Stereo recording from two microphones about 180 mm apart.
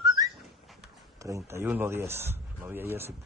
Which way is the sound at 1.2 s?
15° right (ahead or behind).